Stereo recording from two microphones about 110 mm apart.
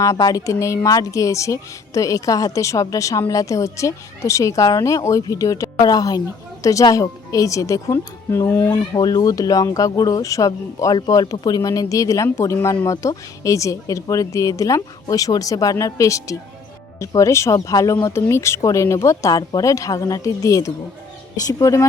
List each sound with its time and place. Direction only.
0.0 s a woman's voice: 35° left (ahead or behind)
9.0 s a woman's voice: 35° left (ahead or behind)